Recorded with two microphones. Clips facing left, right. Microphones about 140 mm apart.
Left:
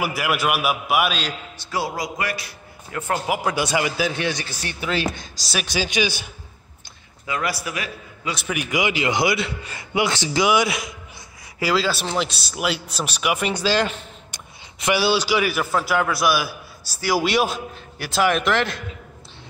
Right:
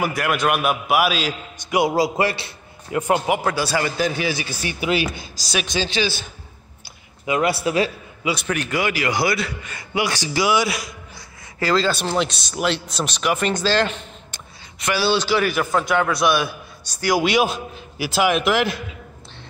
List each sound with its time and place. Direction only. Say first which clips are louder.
0.0 s a man's voice: right 2 dB; 5° left (ahead or behind)
1.6 s speech: right 7 dB; 15° right (ahead or behind)
2.0 s a man's voice: right 7 dB; 30° right (ahead or behind)
3.4 s a man's voice: even; 15° left (ahead or behind)
3.9 s a man's voice: right 1 dB; centre (ahead or behind)
7.2 s a man's voice: right 6 dB; 25° right (ahead or behind)
8.2 s a man's voice: right 5 dB; 5° right (ahead or behind)
8.5 s a man's voice: left 2 dB; 10° left (ahead or behind)
11.6 s a man's voice: right 2 dB; 5° left (ahead or behind)